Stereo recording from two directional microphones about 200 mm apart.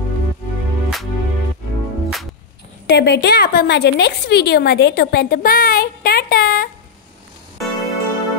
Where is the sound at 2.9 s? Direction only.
55° left (ahead or behind).